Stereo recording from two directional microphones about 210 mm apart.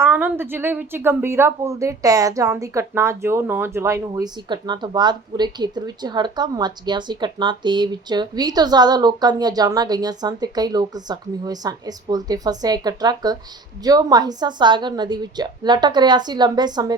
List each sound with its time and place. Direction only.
0.0 s a woman's voice: 10° right (ahead or behind)